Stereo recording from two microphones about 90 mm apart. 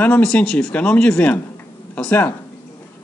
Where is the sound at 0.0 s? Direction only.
15° left (ahead or behind).